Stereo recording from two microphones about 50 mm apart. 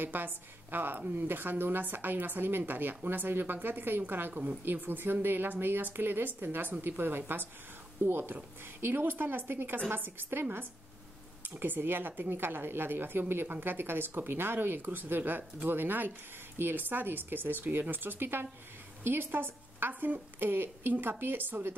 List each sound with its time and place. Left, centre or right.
0.0 s a woman's voice: right
4.3 s a woman's voice: right
4.6 s a woman's voice: right